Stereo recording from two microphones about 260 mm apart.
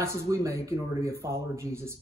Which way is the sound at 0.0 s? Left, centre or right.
Centre.